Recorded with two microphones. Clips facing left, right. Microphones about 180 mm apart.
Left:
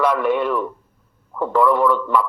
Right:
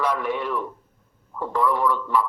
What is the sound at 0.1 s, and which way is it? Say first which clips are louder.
Speech: left 7 dB; 60° left (ahead or behind).